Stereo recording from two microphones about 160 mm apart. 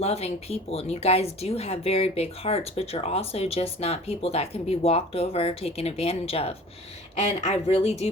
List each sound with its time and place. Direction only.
0.0 s speech: 40° left (ahead or behind)